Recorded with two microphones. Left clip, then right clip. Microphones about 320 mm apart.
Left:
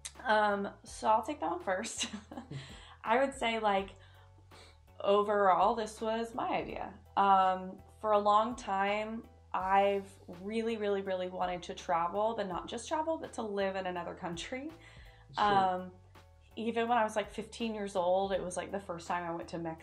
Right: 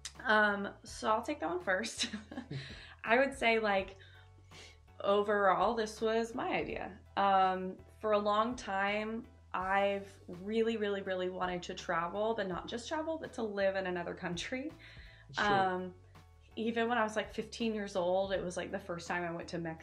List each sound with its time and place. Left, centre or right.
0.0 s speech: centre
4.9 s speech: centre